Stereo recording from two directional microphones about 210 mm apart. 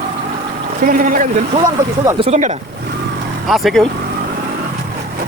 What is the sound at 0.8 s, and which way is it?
Speech, 40° right (ahead or behind).